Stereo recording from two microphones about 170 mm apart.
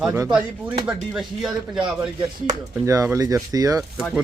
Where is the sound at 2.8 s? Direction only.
20° right (ahead or behind).